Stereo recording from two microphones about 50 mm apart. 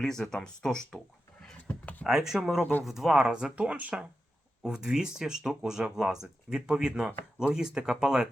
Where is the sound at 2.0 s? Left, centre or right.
Centre; by 4.0 s right.